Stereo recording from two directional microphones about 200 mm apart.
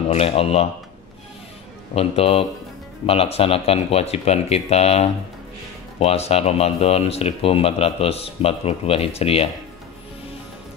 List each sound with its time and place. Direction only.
0.1 s speech: 30° left (ahead or behind)
2.0 s speech: 30° left (ahead or behind)